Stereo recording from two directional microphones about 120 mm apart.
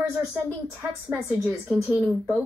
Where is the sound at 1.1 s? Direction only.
15° right (ahead or behind).